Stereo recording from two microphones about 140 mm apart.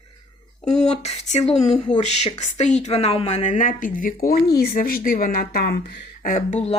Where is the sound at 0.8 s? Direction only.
50° left (ahead or behind); by 6.5 s 85° left.